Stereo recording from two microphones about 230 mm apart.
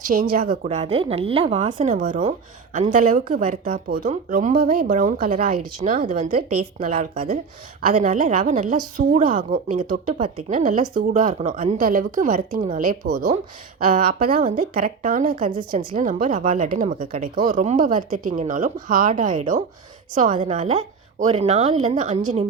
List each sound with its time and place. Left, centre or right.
0.0 s a woman's voice: right